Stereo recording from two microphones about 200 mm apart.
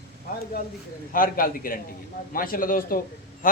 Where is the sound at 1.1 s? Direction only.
45° left (ahead or behind).